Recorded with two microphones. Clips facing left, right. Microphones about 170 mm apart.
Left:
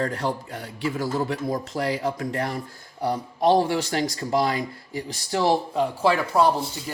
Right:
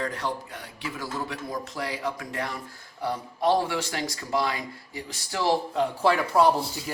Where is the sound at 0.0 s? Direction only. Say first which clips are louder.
Left 4 dB; 40° left (ahead or behind).